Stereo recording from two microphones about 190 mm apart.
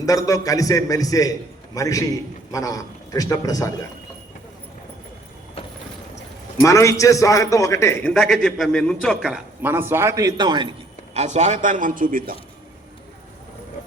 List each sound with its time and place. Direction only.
0.0 s a man's voice: 15° left (ahead or behind)
6.6 s a man's voice: 15° left (ahead or behind)
8.1 s a man's voice: centre (ahead or behind); by 10.7 s 25° right (ahead or behind)
11.1 s a man's voice: 35° right (ahead or behind)